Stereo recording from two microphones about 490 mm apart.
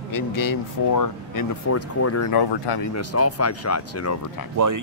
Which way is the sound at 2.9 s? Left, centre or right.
Left.